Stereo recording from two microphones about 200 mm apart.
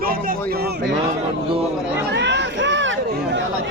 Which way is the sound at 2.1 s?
60° right (ahead or behind).